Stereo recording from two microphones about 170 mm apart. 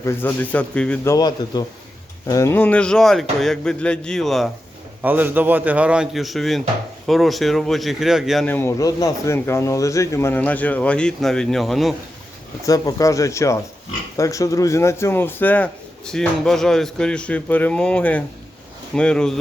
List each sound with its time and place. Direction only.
0.0 s speech: 15° left (ahead or behind)
1.1 s speech: 25° left (ahead or behind); by 4.4 s centre (ahead or behind)
5.0 s a man's voice: 10° right (ahead or behind)
8.4 s speech: 15° left (ahead or behind)
12.6 s speech: 20° left (ahead or behind); by 19.3 s 5° left (ahead or behind)